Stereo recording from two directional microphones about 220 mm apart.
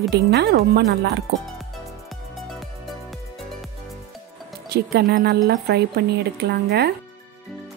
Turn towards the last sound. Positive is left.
turn(degrees=-45)  # may be behind; listen again after turning